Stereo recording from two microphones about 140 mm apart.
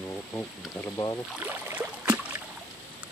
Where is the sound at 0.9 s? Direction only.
25° left (ahead or behind).